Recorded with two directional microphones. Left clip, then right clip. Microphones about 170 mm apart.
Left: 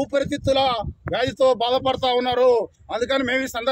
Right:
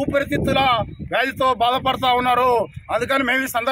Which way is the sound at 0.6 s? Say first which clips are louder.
Right 3 dB; 20° left (ahead or behind).